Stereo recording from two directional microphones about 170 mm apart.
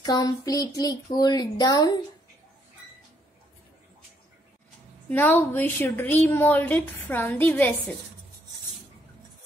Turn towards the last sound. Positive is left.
turn(degrees=10)  # may be behind; listen again after turning